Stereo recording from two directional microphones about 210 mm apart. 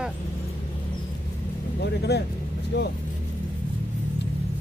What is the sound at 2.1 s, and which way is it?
Speech, 50° left (ahead or behind).